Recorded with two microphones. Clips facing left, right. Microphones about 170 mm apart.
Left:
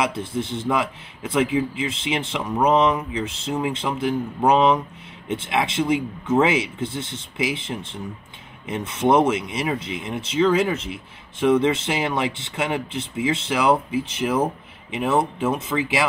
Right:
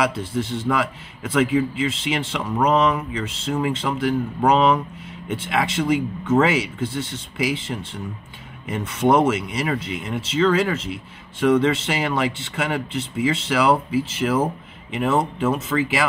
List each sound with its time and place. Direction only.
0.0 s a man's voice: 20° left (ahead or behind)